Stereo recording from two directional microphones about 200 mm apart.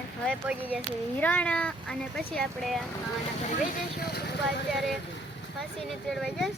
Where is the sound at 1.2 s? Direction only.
5° left (ahead or behind).